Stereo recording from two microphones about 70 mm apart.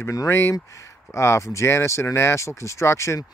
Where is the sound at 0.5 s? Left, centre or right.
Left.